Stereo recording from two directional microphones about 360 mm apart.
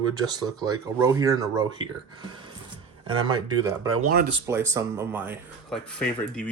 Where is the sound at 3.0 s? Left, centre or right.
Centre.